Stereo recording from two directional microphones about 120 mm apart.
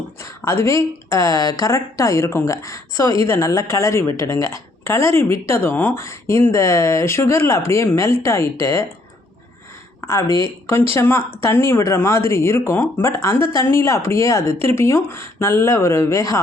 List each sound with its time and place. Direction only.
0.2 s a woman's voice: 25° left (ahead or behind)
10.3 s a woman's voice: 20° left (ahead or behind)